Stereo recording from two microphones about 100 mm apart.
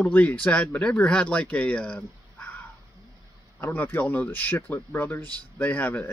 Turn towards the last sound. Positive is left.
turn(degrees=15)  # may be behind; listen again after turning